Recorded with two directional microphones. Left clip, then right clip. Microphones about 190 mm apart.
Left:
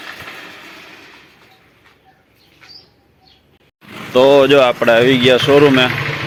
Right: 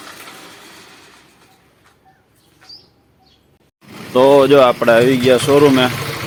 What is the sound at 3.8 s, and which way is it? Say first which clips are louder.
Vehicle: left 4 dB; 55° right (ahead or behind).